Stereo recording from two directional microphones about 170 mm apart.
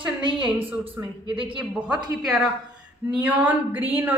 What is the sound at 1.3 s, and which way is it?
Speech, 30° right (ahead or behind).